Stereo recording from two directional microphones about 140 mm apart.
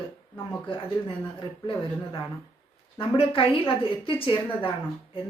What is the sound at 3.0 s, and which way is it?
Speech, 40° left (ahead or behind).